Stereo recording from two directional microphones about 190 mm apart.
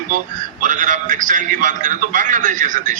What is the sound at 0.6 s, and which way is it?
A man's voice, 45° right (ahead or behind).